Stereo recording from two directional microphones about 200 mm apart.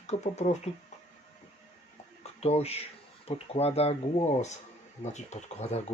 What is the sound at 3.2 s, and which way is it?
Speech, 30° left (ahead or behind).